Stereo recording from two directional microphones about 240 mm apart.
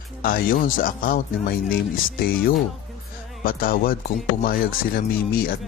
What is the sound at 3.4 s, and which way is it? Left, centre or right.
Speech, left.